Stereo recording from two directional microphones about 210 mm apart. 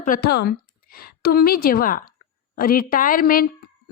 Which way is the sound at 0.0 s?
45° left (ahead or behind).